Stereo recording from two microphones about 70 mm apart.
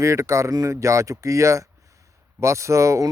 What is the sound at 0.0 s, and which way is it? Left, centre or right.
A man's voice, right.